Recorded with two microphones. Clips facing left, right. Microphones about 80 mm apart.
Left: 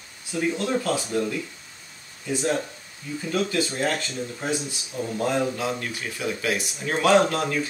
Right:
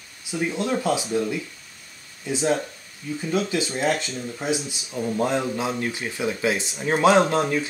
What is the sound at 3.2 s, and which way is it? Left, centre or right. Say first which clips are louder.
Speech: even; centre.